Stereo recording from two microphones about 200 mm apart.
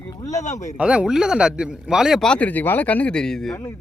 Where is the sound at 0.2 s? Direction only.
15° left (ahead or behind).